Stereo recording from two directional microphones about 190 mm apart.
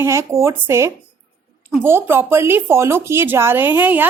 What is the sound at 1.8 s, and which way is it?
Speech, 10° right (ahead or behind).